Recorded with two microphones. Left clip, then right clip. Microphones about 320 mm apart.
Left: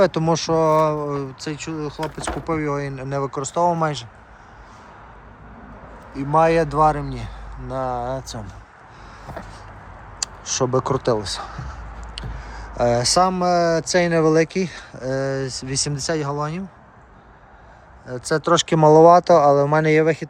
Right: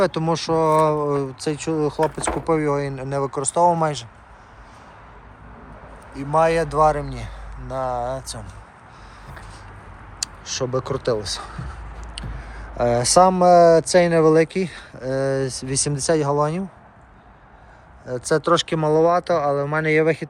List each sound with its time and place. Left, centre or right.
0.0 s speech: centre
6.1 s speech: centre
10.2 s speech: centre
18.0 s speech: centre